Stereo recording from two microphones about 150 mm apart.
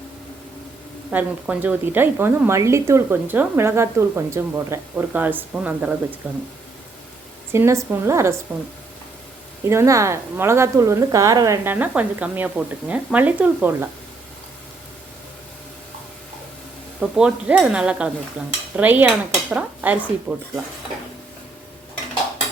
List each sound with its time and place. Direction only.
1.1 s a woman's voice: 10° right (ahead or behind)
7.5 s a woman's voice: 20° right (ahead or behind)
9.6 s a woman's voice: 20° right (ahead or behind)
17.0 s a woman's voice: 5° right (ahead or behind)